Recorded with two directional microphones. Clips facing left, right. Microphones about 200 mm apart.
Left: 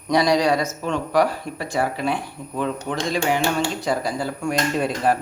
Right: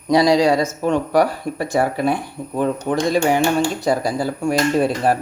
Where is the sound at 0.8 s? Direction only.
50° right (ahead or behind); by 5.1 s 30° right (ahead or behind).